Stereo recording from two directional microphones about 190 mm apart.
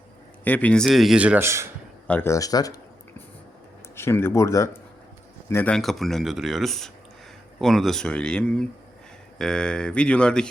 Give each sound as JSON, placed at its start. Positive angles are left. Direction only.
{"t": 0.4, "sound": "speech", "side_deg": 10}
{"t": 2.0, "sound": "speech", "side_deg": 10}
{"t": 3.9, "sound": "speech", "side_deg": 10}